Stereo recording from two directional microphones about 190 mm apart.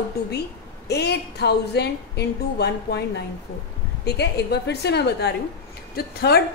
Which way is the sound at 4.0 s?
60° left (ahead or behind).